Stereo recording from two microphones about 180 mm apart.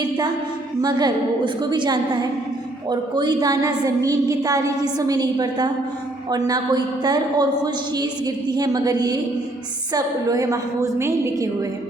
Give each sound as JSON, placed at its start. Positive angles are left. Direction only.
{"t": 0.8, "sound": "a woman's voice", "side_deg": -25}